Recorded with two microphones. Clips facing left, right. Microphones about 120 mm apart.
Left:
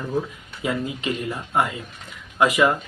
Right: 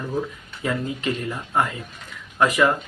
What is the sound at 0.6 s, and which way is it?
Speech, 15° left (ahead or behind).